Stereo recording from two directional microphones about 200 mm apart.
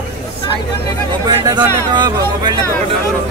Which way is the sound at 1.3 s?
20° right (ahead or behind).